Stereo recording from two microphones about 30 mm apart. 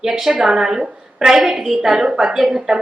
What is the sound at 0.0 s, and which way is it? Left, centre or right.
Speech, centre.